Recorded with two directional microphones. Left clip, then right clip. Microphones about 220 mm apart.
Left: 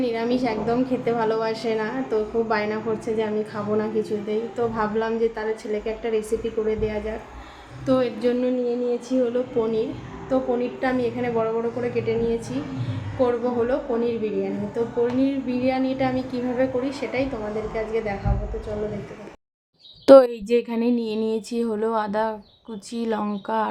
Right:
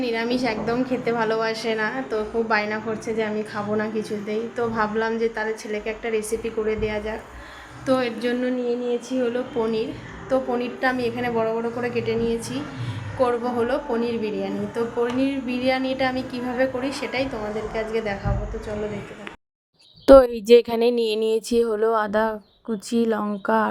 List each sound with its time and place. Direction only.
0.0 s a woman's voice: 5° left (ahead or behind)
20.1 s a woman's voice: centre (ahead or behind)
20.3 s speech: 45° right (ahead or behind); by 23.6 s 25° right (ahead or behind)